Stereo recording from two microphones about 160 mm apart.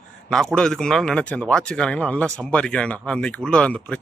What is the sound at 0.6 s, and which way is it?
Speech, 5° left (ahead or behind).